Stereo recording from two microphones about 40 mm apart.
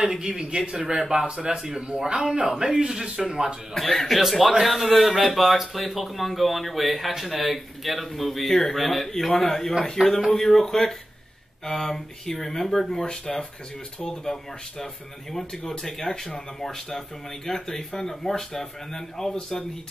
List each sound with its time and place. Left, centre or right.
0.0 s speech: centre
1.5 s speech: centre
4.2 s a man's voice: centre